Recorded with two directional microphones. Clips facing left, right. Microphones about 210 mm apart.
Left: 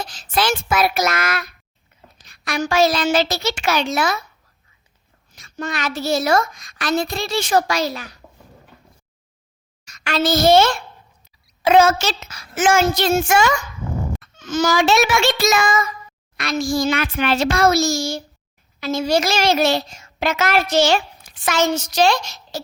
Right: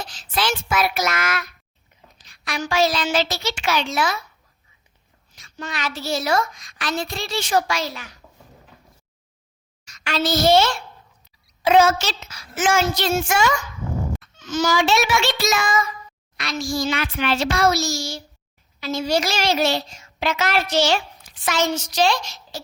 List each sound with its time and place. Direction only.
0.1 s child singing: 45° left (ahead or behind)
2.2 s a child's voice: 45° left (ahead or behind)
5.3 s a child's voice: 45° left (ahead or behind)
9.8 s a woman's voice: 50° left (ahead or behind)